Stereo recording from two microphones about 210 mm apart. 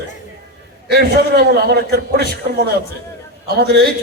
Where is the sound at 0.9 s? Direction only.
50° right (ahead or behind).